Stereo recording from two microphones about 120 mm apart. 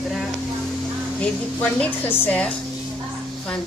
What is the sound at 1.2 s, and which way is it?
A woman's voice, 10° left (ahead or behind).